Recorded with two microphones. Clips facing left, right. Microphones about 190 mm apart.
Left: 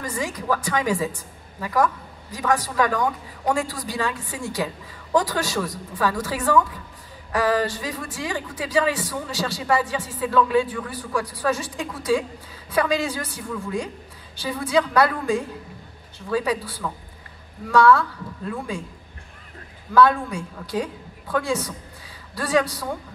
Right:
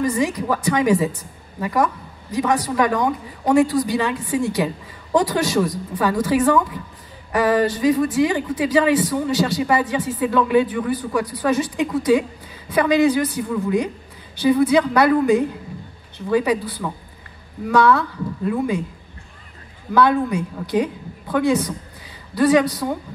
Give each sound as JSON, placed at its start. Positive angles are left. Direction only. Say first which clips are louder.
{"t": 0.0, "sound": "a woman's voice", "louder": "right 8 dB", "side_deg": -20}
{"t": 19.9, "sound": "a woman's voice", "louder": "right 1 dB", "side_deg": -20}